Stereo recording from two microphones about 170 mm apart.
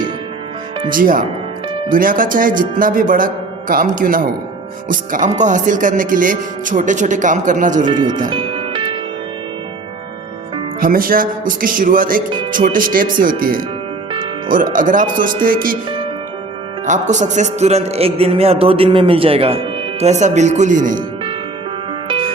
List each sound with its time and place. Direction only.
0.9 s speech: 55° right (ahead or behind)
7.9 s speech: 25° right (ahead or behind)
8.3 s music: 30° right (ahead or behind)
10.8 s speech: 55° right (ahead or behind)
14.1 s music: 30° right (ahead or behind)
14.5 s speech: 50° right (ahead or behind)
16.8 s music: 45° right (ahead or behind)